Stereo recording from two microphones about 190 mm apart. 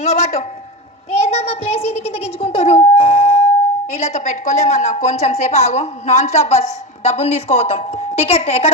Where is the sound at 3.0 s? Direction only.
30° left (ahead or behind).